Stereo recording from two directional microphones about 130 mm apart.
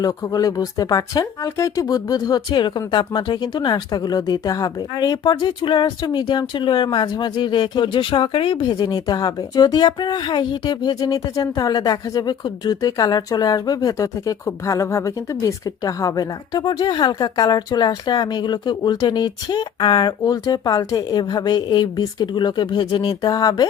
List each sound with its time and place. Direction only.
0.0 s speech: 30° left (ahead or behind)